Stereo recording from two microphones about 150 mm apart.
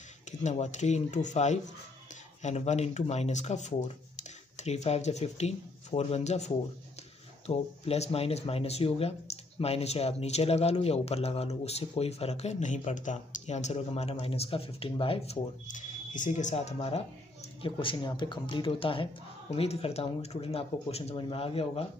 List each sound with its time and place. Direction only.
0.4 s speech: 50° left (ahead or behind)
15.7 s speech: 60° left (ahead or behind); by 21.8 s 40° left (ahead or behind)